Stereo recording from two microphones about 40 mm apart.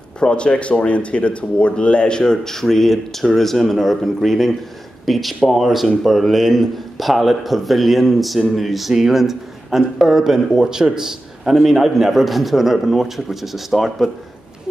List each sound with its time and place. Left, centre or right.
0.2 s a man's voice: left; by 14.0 s centre